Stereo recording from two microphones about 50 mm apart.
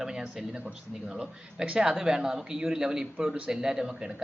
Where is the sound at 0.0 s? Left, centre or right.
Centre.